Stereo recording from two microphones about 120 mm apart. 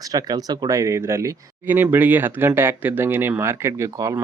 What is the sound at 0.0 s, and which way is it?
Speech, 30° right (ahead or behind).